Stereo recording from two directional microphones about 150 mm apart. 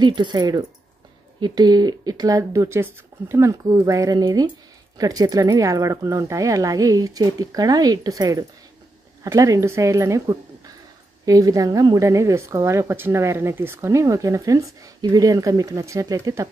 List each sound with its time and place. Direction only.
0.0 s a woman's voice: 30° right (ahead or behind)